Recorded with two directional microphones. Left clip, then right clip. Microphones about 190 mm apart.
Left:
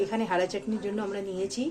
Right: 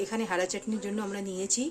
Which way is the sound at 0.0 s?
15° right (ahead or behind).